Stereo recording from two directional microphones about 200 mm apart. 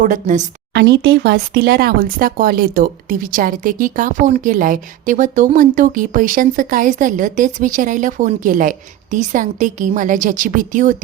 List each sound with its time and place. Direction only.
0.0 s speech: 40° right (ahead or behind)
0.7 s speech: 60° right (ahead or behind); by 10.9 s 40° right (ahead or behind)